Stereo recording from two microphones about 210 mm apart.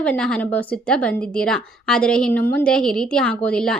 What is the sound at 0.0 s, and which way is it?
A woman's voice, 5° left (ahead or behind).